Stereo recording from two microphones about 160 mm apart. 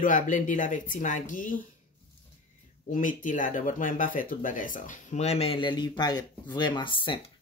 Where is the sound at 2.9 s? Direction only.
55° left (ahead or behind); by 7.2 s 30° left (ahead or behind).